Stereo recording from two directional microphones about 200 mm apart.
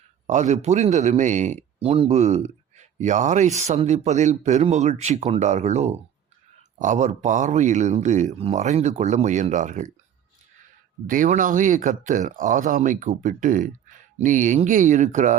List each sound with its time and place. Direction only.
0.3 s a man's voice: 35° right (ahead or behind)
11.0 s a man's voice: 40° right (ahead or behind)